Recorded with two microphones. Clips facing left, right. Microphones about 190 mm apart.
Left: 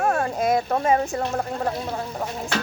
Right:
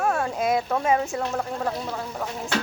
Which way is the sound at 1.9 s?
20° left (ahead or behind).